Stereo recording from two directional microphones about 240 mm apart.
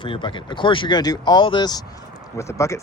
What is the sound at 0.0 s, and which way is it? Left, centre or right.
Speech, left.